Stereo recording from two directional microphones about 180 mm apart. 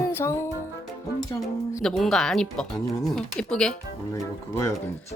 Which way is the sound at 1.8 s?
Centre (ahead or behind).